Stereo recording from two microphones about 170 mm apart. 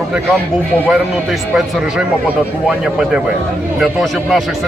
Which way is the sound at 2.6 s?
5° right (ahead or behind).